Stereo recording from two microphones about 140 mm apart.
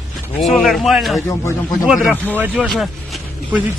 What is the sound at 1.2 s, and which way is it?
Speech, 20° left (ahead or behind).